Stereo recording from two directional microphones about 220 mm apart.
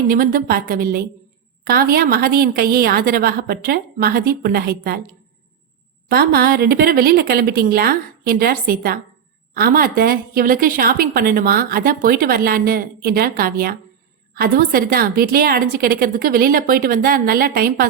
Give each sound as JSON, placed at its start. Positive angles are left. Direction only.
{"t": 0.1, "sound": "a woman's voice", "side_deg": -40}
{"t": 6.1, "sound": "a woman's voice", "side_deg": -45}